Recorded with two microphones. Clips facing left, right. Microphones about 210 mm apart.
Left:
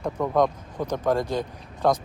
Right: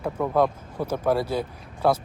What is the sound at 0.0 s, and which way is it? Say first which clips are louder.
A man's voice: even; 5° right (ahead or behind).